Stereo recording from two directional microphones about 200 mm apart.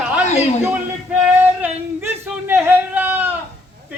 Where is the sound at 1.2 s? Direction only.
5° right (ahead or behind).